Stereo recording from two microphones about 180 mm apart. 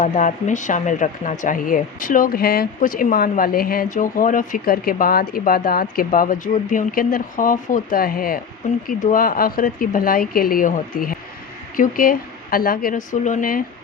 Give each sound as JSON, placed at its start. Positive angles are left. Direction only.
{"t": 0.0, "sound": "speech", "side_deg": 45}